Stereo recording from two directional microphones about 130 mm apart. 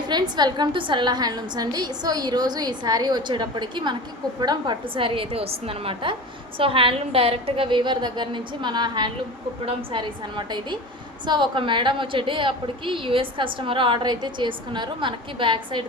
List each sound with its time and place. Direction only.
0.1 s a woman's voice: 35° right (ahead or behind)